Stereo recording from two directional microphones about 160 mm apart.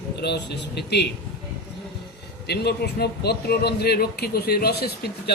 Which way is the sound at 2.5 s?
90° left.